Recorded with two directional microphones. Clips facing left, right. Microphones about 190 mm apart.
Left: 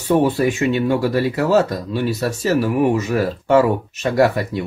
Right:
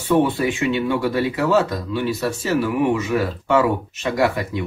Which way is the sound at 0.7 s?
40° left (ahead or behind).